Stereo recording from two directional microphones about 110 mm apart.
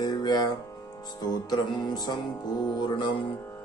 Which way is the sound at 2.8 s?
45° left (ahead or behind).